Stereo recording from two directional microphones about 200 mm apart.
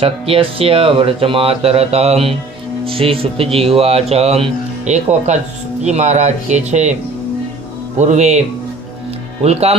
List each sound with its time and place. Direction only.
0.0 s speech: 30° right (ahead or behind)
7.9 s speech: 35° right (ahead or behind)